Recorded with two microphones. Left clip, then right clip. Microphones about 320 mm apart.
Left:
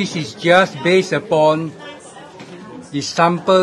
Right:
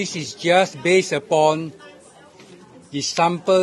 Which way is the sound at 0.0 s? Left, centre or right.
Right.